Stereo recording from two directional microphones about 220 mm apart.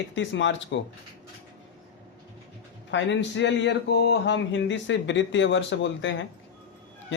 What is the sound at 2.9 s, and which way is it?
Speech, 55° left (ahead or behind).